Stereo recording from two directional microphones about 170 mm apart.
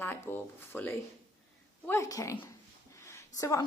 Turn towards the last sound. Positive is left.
turn(degrees=20)  # may be behind; listen again after turning